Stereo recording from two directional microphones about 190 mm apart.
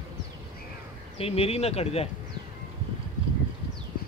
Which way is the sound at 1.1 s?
30° left (ahead or behind).